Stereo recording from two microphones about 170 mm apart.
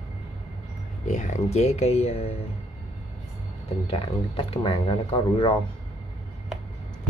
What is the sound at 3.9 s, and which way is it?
Speech, 30° left (ahead or behind).